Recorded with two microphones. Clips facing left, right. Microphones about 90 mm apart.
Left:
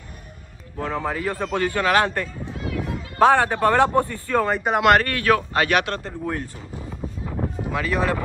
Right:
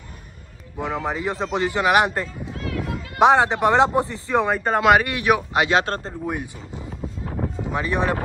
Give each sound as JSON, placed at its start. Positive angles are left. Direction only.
{"t": 0.7, "sound": "a man's voice", "side_deg": -15}
{"t": 2.4, "sound": "a sound", "side_deg": 20}
{"t": 3.2, "sound": "a man's voice", "side_deg": -20}
{"t": 4.6, "sound": "speech", "side_deg": 5}
{"t": 4.9, "sound": "speech", "side_deg": -15}
{"t": 5.9, "sound": "speech", "side_deg": -35}
{"t": 6.2, "sound": "speech", "side_deg": -15}
{"t": 7.3, "sound": "a sound", "side_deg": 5}
{"t": 7.7, "sound": "a man's voice", "side_deg": -30}